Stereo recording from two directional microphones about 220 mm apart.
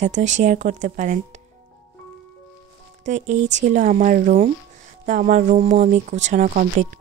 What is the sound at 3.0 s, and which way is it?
A woman's voice, 35° right (ahead or behind).